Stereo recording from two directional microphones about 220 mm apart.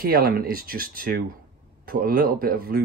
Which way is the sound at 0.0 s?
45° right (ahead or behind).